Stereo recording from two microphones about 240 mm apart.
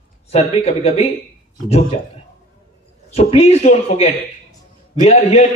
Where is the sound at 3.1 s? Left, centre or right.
Left.